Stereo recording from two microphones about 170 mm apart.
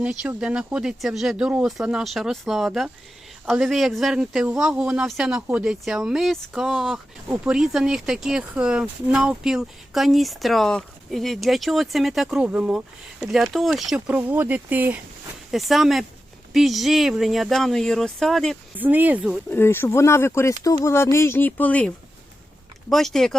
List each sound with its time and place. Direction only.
0.0 s speech: 5° right (ahead or behind)
18.8 s speech: 10° right (ahead or behind)
19.5 s speech: 15° left (ahead or behind)